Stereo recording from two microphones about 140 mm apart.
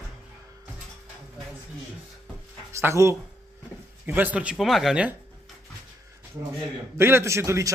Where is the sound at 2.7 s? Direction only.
20° right (ahead or behind).